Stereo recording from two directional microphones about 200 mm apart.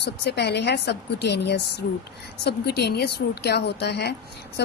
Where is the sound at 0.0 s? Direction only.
55° left (ahead or behind).